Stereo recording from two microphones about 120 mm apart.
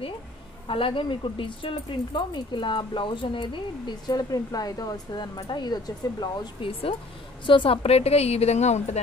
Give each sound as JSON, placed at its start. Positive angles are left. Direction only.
{"t": 0.7, "sound": "speech", "side_deg": 45}
{"t": 6.6, "sound": "a woman's voice", "side_deg": 50}